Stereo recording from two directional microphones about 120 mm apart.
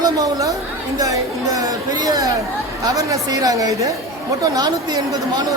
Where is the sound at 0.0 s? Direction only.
30° right (ahead or behind).